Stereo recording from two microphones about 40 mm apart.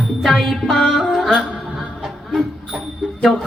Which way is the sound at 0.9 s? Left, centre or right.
Centre.